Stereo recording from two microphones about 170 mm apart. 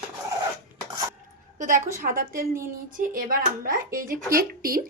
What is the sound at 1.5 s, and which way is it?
A woman's voice, 50° right (ahead or behind).